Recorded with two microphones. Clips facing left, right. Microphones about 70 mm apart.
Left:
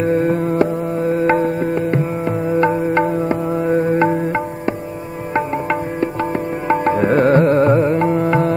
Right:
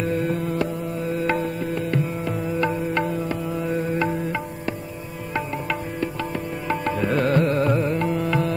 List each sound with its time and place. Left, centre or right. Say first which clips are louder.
0.0 s music: left 8 dB; left